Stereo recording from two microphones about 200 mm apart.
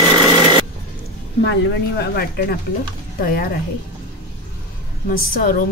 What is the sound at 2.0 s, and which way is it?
A woman's voice, 50° left (ahead or behind).